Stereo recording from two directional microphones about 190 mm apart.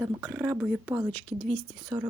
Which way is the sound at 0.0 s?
5° right (ahead or behind).